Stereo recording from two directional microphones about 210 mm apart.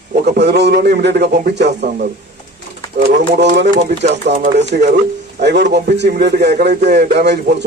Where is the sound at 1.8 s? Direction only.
40° right (ahead or behind).